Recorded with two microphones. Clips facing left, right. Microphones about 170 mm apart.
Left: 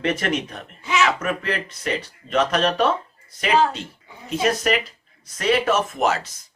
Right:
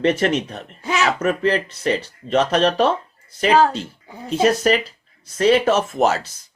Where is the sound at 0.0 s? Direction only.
30° right (ahead or behind).